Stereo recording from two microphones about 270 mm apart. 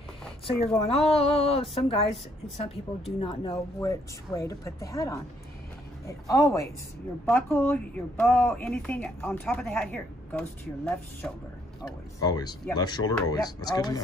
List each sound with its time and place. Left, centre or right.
0.5 s a woman's voice: left; by 11.4 s centre
11.8 s speech: centre